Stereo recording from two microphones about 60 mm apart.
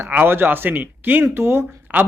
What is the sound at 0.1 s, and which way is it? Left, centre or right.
A man's voice, right.